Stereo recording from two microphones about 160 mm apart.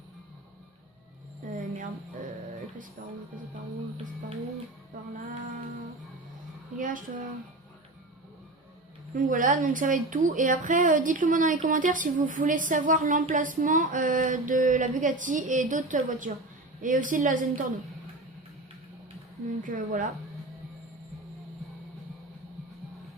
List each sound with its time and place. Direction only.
1.5 s a sound: 60° right (ahead or behind)
6.7 s a woman's voice: 55° right (ahead or behind)
9.1 s a woman's voice: 55° right (ahead or behind)
19.6 s a woman's voice: 55° right (ahead or behind)